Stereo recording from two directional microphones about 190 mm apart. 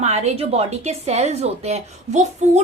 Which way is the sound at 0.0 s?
35° right (ahead or behind).